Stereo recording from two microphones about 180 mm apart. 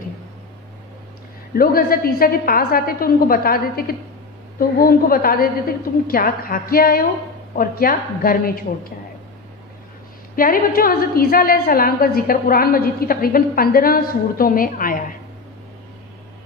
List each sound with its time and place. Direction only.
1.5 s a woman's voice: 55° left (ahead or behind)
10.3 s a woman's voice: 50° left (ahead or behind)